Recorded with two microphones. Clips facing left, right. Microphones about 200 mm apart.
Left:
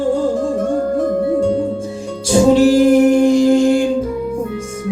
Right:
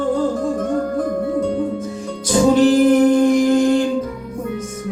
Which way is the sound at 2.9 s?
25° left (ahead or behind).